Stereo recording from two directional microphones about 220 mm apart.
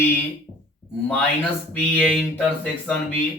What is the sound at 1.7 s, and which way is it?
Music, 5° left (ahead or behind).